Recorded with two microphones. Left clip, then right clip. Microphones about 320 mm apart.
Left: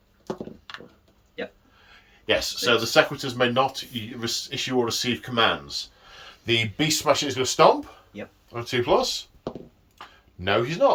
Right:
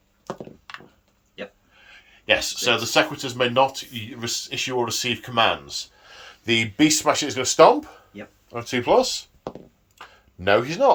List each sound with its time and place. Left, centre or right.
0.7 s wood: centre
2.2 s speech: centre